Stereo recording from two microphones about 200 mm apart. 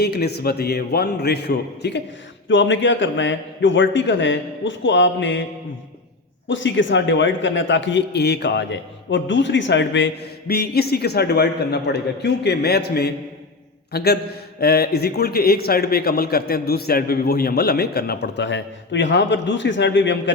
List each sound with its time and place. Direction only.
0.0 s a man's voice: 55° left (ahead or behind)
2.5 s a man's voice: 65° left (ahead or behind)
6.5 s a man's voice: 70° left (ahead or behind)
10.5 s a man's voice: 50° left (ahead or behind)